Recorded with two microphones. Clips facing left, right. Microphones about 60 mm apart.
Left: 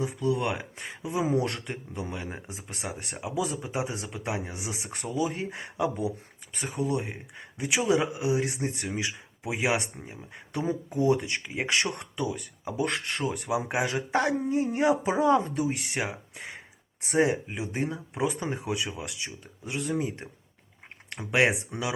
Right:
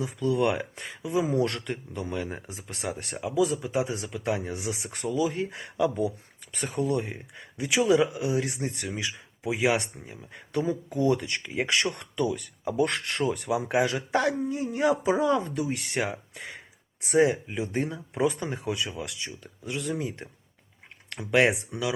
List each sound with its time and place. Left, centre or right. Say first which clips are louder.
0.0 s speech: right 1 dB; centre
0.4 s speech: right 4 dB; centre
1.0 s speech: right 2 dB; left
1.5 s speech: right 2 dB; centre
6.0 s speech: right 3 dB; centre
7.9 s speech: right 1 dB; left
11.7 s speech: left 2 dB; left
12.3 s speech: right 4 dB; centre; by 14.6 s left
14.6 s speech: right 1 dB; left
15.9 s speech: right 2 dB; centre
17.1 s speech: right 2 dB; left
17.5 s speech: right 2 dB; centre
18.6 s speech: right 1 dB; left